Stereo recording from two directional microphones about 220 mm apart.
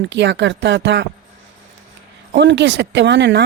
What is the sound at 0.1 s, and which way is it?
Speech, 55° right (ahead or behind).